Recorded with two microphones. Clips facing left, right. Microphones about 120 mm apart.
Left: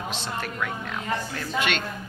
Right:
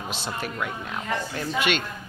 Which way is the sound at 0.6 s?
20° right (ahead or behind).